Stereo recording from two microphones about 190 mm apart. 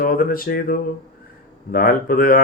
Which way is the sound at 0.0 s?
50° left (ahead or behind).